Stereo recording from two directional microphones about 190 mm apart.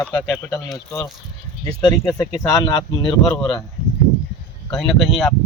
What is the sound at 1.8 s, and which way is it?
Speech, 20° left (ahead or behind).